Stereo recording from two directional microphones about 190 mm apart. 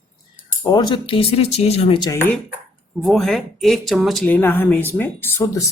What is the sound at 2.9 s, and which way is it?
Speech, centre (ahead or behind).